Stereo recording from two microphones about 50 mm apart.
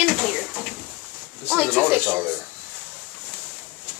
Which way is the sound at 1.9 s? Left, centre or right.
Right.